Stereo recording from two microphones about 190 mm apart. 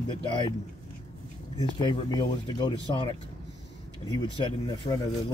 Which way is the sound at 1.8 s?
25° left (ahead or behind).